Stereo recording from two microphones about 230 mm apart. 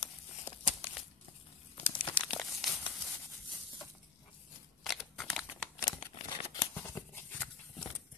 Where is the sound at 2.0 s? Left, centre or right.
Left.